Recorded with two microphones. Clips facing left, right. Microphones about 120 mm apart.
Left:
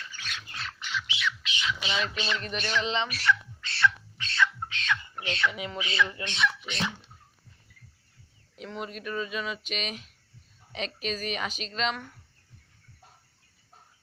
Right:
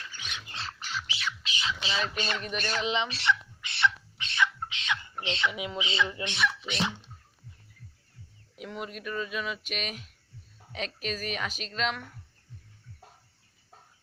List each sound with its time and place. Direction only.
0.2 s squawk: 15° right (ahead or behind)
0.6 s squawk: 40° right (ahead or behind)
2.6 s speech: 45° right (ahead or behind)
2.8 s speech: 10° right (ahead or behind)
3.1 s a sound: 25° right (ahead or behind)
5.2 s speech: 20° right (ahead or behind)
6.3 s speech: centre (ahead or behind)
8.5 s speech: 5° right (ahead or behind)